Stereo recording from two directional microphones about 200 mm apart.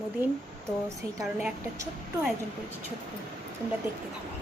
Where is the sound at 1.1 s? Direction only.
15° right (ahead or behind).